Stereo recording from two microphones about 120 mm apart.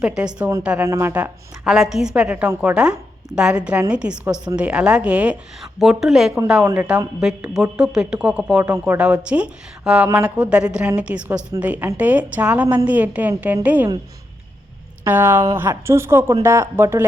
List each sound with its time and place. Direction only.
0.0 s speech: 5° right (ahead or behind)
0.9 s speech: 20° right (ahead or behind)
1.6 s a woman's voice: 5° right (ahead or behind)
15.0 s speech: 15° right (ahead or behind)